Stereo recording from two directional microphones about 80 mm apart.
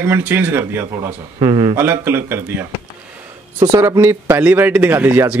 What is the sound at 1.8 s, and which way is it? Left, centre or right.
Speech, right.